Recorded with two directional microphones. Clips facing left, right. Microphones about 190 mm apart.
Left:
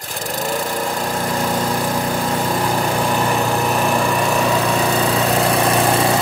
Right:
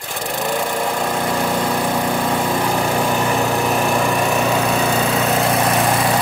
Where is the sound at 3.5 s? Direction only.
40° left (ahead or behind).